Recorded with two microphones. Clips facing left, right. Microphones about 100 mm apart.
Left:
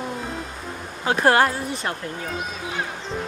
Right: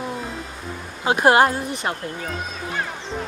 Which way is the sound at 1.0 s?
15° right (ahead or behind).